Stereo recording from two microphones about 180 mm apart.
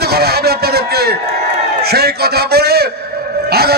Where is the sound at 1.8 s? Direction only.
60° right (ahead or behind).